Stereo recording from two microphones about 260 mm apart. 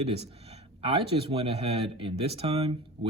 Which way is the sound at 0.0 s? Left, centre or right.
Right.